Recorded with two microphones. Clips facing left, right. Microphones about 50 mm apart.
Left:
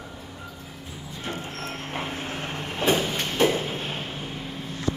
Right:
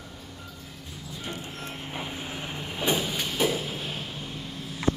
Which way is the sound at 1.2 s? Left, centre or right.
Centre.